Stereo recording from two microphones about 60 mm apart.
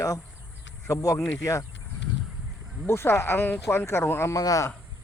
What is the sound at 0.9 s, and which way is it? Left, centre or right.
Speech, left.